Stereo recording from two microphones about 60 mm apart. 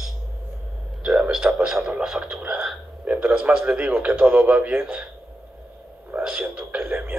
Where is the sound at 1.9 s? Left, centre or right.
Centre.